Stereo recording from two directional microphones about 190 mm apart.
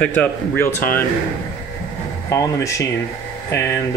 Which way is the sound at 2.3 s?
15° left (ahead or behind).